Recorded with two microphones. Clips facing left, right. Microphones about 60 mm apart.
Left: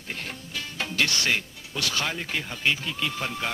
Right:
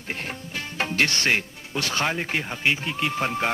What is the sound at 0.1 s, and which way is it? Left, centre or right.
Speech, right.